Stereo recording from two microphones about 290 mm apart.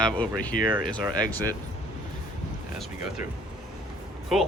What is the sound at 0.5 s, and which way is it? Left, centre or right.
Speech, left.